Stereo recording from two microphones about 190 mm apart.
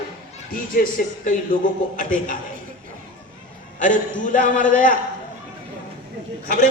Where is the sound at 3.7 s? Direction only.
45° left (ahead or behind).